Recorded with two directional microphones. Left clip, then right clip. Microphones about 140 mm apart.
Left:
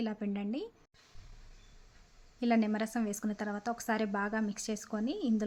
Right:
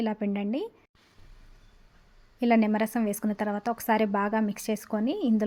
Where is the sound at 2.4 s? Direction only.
25° right (ahead or behind).